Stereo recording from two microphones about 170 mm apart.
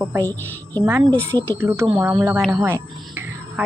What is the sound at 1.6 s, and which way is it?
A woman's voice, 15° right (ahead or behind).